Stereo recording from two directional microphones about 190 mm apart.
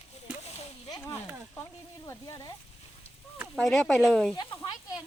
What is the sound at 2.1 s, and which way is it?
Speech, 20° left (ahead or behind).